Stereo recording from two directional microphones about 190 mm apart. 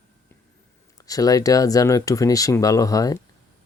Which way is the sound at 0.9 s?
20° left (ahead or behind).